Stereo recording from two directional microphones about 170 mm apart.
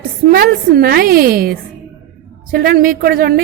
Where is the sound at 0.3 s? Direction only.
60° right (ahead or behind).